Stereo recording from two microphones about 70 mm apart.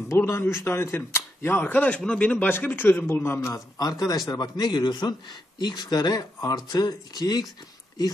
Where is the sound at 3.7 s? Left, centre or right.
Left.